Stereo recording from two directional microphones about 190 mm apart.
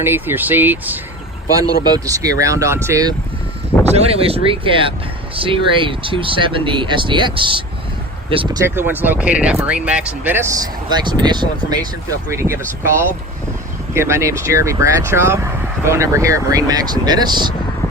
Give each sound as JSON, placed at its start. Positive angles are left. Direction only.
{"t": 0.0, "sound": "speech", "side_deg": -10}
{"t": 3.9, "sound": "speech", "side_deg": -30}
{"t": 8.6, "sound": "speech", "side_deg": -10}
{"t": 13.9, "sound": "speech", "side_deg": -15}